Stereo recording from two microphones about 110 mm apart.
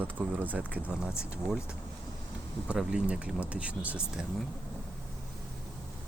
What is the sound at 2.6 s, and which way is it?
Speech, 10° right (ahead or behind).